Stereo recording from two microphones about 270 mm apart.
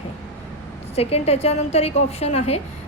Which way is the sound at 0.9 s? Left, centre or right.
Left.